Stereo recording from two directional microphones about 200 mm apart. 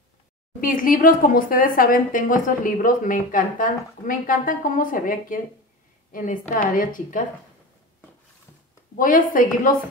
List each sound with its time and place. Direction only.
0.6 s a woman's voice: 45° left (ahead or behind)
6.8 s a woman's voice: 40° left (ahead or behind)
8.9 s a woman's voice: 40° left (ahead or behind)